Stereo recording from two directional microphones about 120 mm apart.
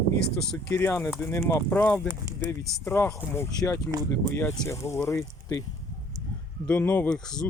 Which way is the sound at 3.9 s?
30° right (ahead or behind).